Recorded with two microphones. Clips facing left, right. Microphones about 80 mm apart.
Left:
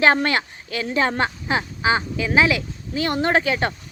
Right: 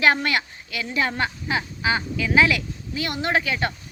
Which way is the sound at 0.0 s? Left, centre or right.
Left.